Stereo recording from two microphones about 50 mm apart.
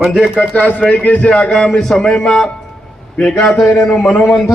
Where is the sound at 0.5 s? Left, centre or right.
Left.